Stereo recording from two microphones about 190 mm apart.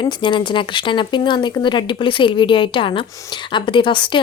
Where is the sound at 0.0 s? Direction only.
25° left (ahead or behind).